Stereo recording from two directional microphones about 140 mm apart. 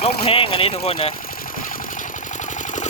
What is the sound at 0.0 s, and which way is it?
Speech, 40° left (ahead or behind).